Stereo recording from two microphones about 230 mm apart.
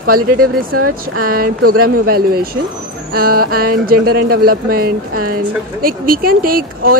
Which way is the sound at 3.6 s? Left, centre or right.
Right.